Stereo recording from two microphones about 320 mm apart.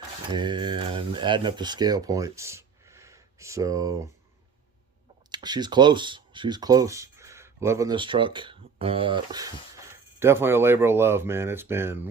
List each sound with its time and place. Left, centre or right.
0.3 s speech: centre
5.3 s speech: centre